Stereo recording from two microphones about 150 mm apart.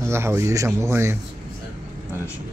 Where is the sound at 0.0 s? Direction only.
15° right (ahead or behind).